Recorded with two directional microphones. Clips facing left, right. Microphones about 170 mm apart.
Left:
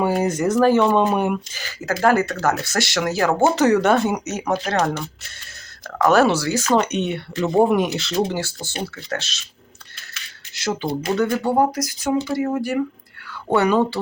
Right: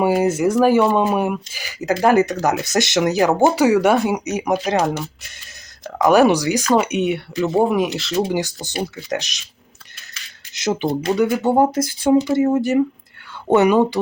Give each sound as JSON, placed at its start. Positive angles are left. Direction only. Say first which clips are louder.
{"t": 0.0, "sound": "speech", "louder": "right 3 dB", "side_deg": -5}
{"t": 8.3, "sound": "speech", "louder": "right 4 dB", "side_deg": -15}
{"t": 10.5, "sound": "speech", "louder": "right 4 dB", "side_deg": -20}
{"t": 11.4, "sound": "speech", "louder": "right 3 dB", "side_deg": -25}